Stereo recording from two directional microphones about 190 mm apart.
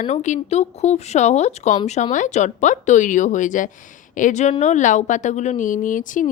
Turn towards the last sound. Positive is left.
turn(degrees=45)  # may be behind; listen again after turning